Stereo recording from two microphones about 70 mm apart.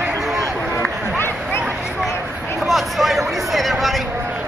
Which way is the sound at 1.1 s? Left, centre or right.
Left.